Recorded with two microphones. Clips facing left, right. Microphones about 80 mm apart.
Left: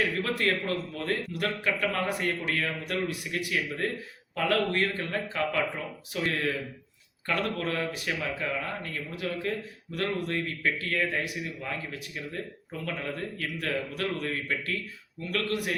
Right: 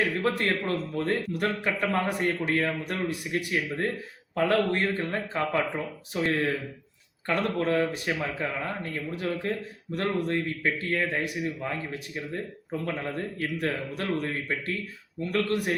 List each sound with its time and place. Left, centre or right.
0.2 s a man's voice: right